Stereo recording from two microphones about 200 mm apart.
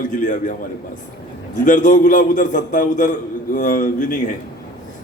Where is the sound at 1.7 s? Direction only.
40° left (ahead or behind).